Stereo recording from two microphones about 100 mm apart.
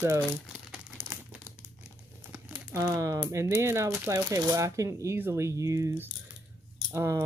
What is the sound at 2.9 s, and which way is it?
Speech, 30° right (ahead or behind).